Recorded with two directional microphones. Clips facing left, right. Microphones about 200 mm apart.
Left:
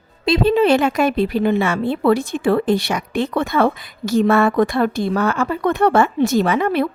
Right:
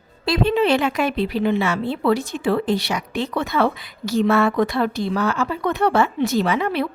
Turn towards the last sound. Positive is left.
turn(degrees=50)  # may be behind; listen again after turning